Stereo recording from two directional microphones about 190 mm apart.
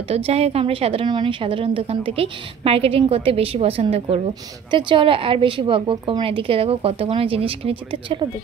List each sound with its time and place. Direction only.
0.1 s a woman's voice: 30° right (ahead or behind)